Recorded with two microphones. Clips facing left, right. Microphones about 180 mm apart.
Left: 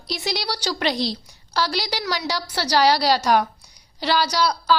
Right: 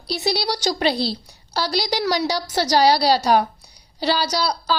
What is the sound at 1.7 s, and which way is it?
A woman's voice, 40° right (ahead or behind).